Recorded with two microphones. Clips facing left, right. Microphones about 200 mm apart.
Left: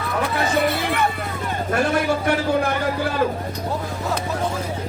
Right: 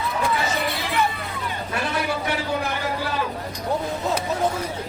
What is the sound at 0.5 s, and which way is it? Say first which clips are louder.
Vehicle: left 5 dB; 55° left (ahead or behind).